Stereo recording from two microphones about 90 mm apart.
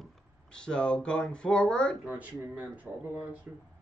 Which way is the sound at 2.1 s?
15° right (ahead or behind).